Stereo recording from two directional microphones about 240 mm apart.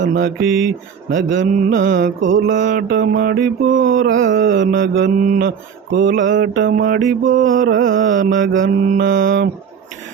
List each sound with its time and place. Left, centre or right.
0.0 s mantra: right
0.4 s mantra: right
1.1 s mantra: right
2.6 s mantra: right
5.1 s mantra: right
5.5 s mantra: right
6.7 s mantra: right
7.0 s mantra: right